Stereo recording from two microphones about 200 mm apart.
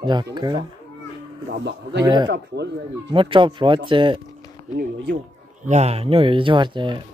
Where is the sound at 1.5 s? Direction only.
60° right (ahead or behind).